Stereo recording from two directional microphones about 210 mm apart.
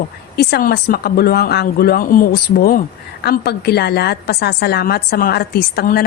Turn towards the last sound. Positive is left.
turn(degrees=50)  # may be behind; listen again after turning